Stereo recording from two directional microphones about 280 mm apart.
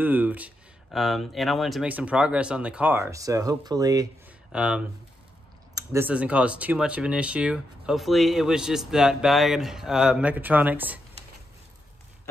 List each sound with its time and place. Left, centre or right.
0.0 s speech: centre